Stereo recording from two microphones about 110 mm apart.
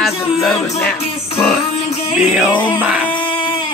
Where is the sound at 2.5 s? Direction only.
45° left (ahead or behind).